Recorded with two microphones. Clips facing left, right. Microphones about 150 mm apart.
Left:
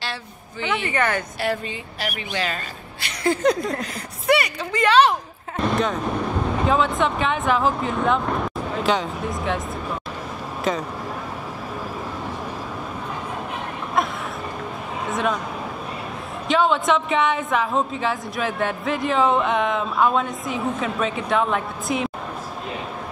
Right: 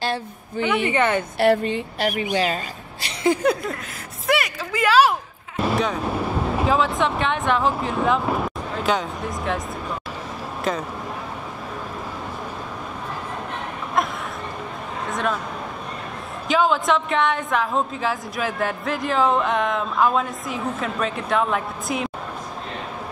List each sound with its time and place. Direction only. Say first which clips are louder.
0.0 s speech: right 6 dB; 45° right (ahead or behind)
0.8 s a woman's voice: right 1 dB; 20° right (ahead or behind)
1.4 s a woman's voice: right 7 dB; 60° right (ahead or behind)
2.3 s a woman's voice: right 2 dB; 35° right (ahead or behind)
3.4 s a woman's voice: left 1 dB; 10° right (ahead or behind)
15.0 s speech: left 1 dB; centre (ahead or behind)
16.4 s a woman's voice: even; centre (ahead or behind)